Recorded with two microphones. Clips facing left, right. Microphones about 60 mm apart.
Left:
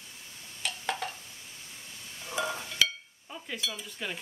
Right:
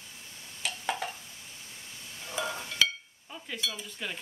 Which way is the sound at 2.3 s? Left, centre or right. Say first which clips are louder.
Left 1 dB; centre.